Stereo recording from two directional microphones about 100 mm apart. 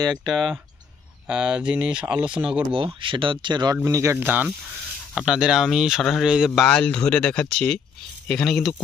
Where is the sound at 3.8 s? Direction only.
30° right (ahead or behind).